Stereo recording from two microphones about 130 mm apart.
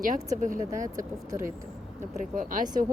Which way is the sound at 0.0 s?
85° right.